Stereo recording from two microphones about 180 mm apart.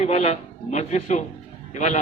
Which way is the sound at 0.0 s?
35° left (ahead or behind).